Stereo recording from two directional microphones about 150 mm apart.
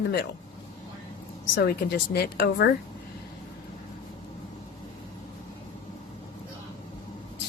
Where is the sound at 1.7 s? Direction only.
90° left.